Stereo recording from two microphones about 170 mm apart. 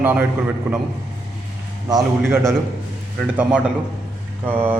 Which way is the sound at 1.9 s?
20° right (ahead or behind).